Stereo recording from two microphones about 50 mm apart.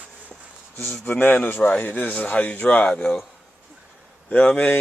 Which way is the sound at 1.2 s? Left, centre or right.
Left.